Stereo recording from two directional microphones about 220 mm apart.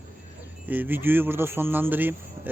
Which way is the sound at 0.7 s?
10° right (ahead or behind).